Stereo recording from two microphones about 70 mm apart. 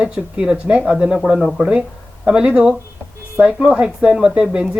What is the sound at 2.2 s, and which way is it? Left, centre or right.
Speech, centre.